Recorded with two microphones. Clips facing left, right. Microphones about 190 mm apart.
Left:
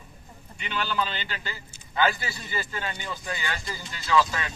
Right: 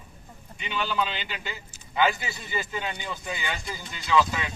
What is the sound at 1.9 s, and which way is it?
A man's voice, 15° right (ahead or behind).